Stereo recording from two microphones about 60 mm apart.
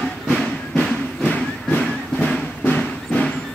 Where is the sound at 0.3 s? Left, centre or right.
Centre.